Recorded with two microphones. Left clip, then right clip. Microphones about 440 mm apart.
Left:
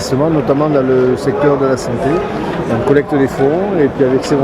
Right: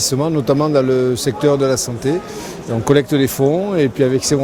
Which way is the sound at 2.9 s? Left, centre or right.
Right.